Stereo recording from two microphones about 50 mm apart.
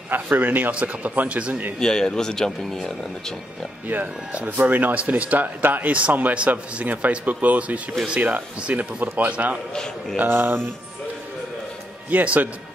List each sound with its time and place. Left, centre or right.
0.1 s speech: right
1.8 s speech: centre
3.8 s speech: right
10.1 s speech: right
12.1 s speech: right